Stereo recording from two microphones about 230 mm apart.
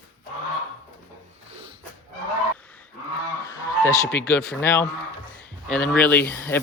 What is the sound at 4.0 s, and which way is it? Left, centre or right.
Speech, centre.